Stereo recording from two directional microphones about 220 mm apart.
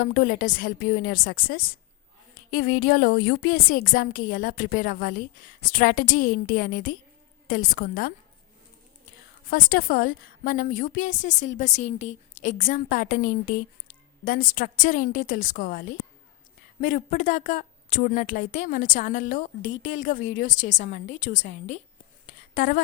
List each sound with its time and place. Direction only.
0.0 s a woman's voice: 45° left (ahead or behind)
9.5 s a woman's voice: 45° left (ahead or behind)
22.3 s a sound: 40° left (ahead or behind)